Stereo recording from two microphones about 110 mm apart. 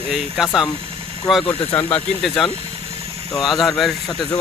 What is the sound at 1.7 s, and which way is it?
Speech, 15° left (ahead or behind).